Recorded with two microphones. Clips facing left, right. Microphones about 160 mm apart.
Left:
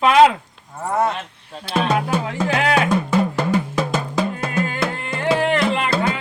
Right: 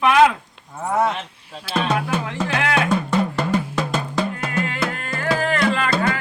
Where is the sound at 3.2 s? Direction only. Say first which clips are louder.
Left 2 dB; 5° left (ahead or behind).